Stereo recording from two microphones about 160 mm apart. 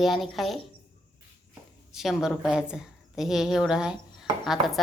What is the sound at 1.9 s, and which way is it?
A woman's voice, 5° right (ahead or behind).